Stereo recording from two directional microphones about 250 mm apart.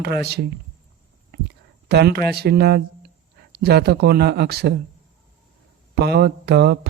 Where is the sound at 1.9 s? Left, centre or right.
Right.